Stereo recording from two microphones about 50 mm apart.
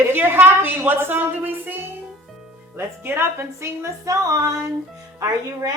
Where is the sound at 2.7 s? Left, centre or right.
Right.